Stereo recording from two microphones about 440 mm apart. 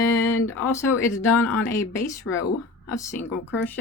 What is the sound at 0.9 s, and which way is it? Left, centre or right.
Speech, centre.